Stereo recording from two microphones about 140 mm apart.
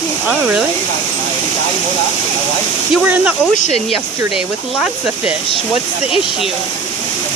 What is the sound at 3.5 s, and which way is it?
Speech, 55° left (ahead or behind).